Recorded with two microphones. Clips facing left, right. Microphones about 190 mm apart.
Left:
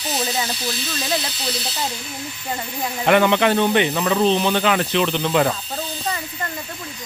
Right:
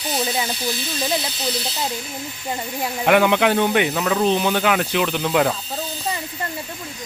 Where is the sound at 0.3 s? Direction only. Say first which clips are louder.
Right 1 dB; 15° right (ahead or behind).